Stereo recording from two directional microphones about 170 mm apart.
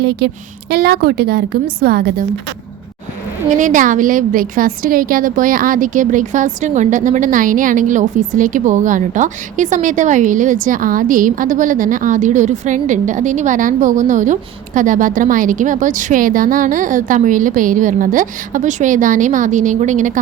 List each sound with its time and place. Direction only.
0.0 s a woman's voice: 70° right (ahead or behind)
3.5 s a woman's voice: 50° right (ahead or behind)